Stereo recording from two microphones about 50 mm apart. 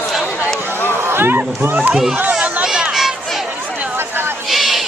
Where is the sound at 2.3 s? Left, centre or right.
Right.